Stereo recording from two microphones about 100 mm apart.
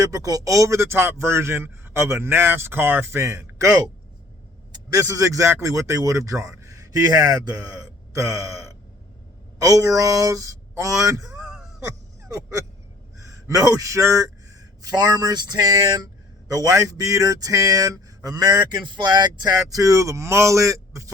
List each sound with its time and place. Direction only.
0.0 s speech: 35° right (ahead or behind)
5.0 s speech: 35° right (ahead or behind)
11.4 s throat clearing: 5° right (ahead or behind)
11.9 s a sound: 30° right (ahead or behind)
13.2 s a man's voice: 30° right (ahead or behind)
14.8 s speech: 40° right (ahead or behind)
19.7 s speech: 35° right (ahead or behind)